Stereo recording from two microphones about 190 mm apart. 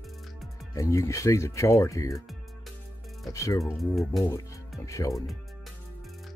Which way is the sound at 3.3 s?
15° left (ahead or behind).